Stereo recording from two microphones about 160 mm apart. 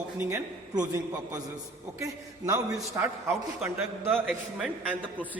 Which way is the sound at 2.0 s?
20° right (ahead or behind).